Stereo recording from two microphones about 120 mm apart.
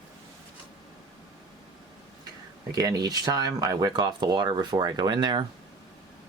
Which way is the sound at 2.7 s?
30° right (ahead or behind).